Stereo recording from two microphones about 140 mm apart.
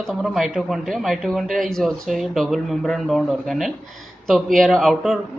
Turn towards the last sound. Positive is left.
turn(degrees=0)  # may be behind; listen again after turning